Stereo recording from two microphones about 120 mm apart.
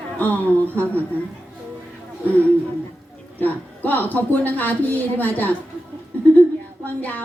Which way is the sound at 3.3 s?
15° left (ahead or behind).